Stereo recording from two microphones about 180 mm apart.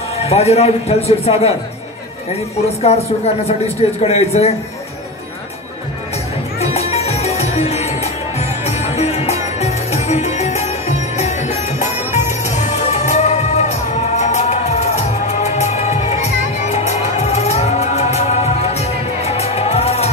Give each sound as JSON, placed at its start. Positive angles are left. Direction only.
{"t": 0.2, "sound": "a man's voice", "side_deg": 35}
{"t": 2.8, "sound": "a man's voice", "side_deg": 35}
{"t": 6.6, "sound": "music", "side_deg": 35}